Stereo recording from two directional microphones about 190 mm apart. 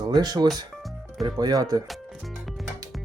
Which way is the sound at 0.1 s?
20° right (ahead or behind).